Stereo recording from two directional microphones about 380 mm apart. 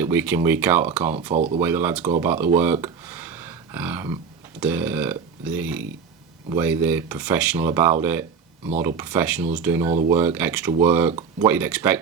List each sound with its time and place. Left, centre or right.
0.0 s speech: centre
1.3 s speech: centre
1.5 s speech: centre
2.8 s a sound: centre
4.6 s speech: centre
9.0 s speech: centre
11.1 s speech: centre
11.4 s speech: centre